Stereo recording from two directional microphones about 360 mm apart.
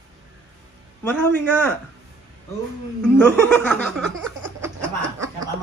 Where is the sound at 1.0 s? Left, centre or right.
Centre.